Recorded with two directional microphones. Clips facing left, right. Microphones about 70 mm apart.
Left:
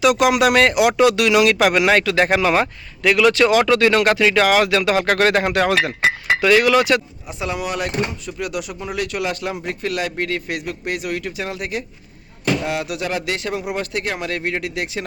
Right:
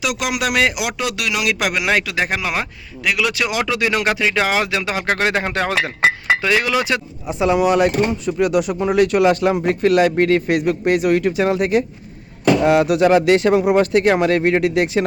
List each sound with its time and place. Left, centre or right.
0.0 s speech: centre; by 15.0 s right